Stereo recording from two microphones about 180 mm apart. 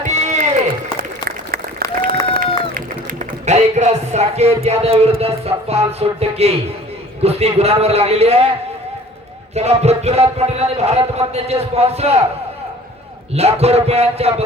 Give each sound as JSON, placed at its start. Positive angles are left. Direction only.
{"t": 0.0, "sound": "run", "side_deg": -40}
{"t": 2.0, "sound": "run", "side_deg": -55}
{"t": 3.4, "sound": "speech", "side_deg": -40}
{"t": 9.6, "sound": "speech", "side_deg": -35}
{"t": 13.3, "sound": "speech", "side_deg": -35}